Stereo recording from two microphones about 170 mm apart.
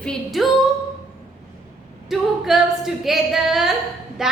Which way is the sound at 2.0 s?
Centre (ahead or behind).